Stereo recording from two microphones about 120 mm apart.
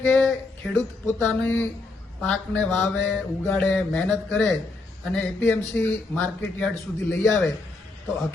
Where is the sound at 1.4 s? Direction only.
15° left (ahead or behind).